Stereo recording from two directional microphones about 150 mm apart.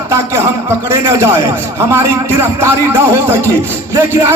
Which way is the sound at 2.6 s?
15° right (ahead or behind).